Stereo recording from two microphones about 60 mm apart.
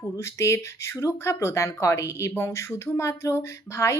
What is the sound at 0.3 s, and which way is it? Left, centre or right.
Speech, left.